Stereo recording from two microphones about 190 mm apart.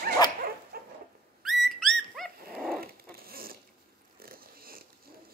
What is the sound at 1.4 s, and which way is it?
Dog, centre (ahead or behind).